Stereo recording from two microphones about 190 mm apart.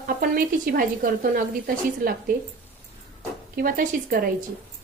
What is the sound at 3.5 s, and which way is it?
Speech, 50° right (ahead or behind).